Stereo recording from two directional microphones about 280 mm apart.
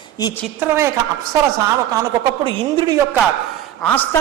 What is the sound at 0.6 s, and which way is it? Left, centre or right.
Speech, centre.